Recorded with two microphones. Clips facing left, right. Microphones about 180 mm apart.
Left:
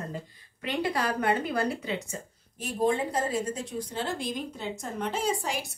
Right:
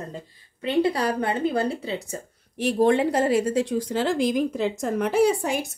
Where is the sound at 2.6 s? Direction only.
70° right (ahead or behind).